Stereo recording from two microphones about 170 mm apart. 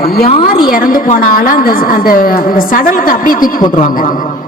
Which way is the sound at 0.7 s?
55° left (ahead or behind).